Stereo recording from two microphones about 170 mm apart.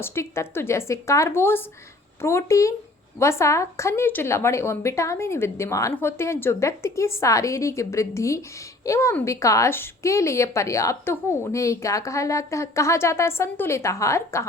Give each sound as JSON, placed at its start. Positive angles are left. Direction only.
{"t": 0.0, "sound": "speech", "side_deg": 15}